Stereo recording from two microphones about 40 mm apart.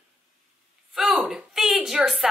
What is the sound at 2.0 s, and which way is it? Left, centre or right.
Speech, centre.